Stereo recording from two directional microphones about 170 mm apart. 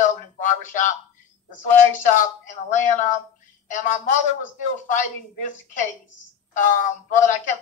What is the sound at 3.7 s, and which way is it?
Speech, 50° left (ahead or behind).